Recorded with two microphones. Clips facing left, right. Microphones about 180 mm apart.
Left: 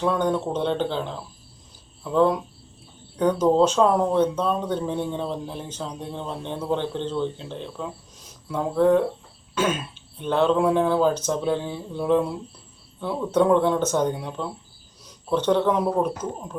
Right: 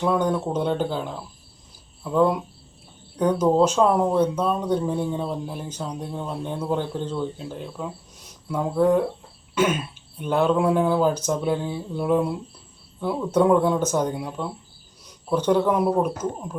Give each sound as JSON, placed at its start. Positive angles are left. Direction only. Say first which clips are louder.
{"t": 0.0, "sound": "speech", "louder": "right 1 dB", "side_deg": -10}
{"t": 2.1, "sound": "speech", "louder": "even", "side_deg": -10}
{"t": 10.2, "sound": "speech", "louder": "even", "side_deg": -10}
{"t": 15.4, "sound": "speech", "louder": "right 1 dB", "side_deg": -10}